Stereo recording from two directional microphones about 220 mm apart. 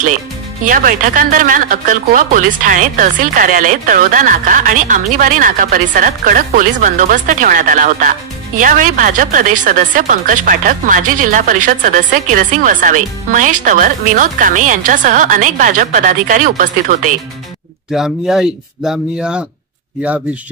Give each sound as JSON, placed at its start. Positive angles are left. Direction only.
{"t": 0.7, "sound": "speech", "side_deg": -35}
{"t": 17.9, "sound": "speech", "side_deg": -5}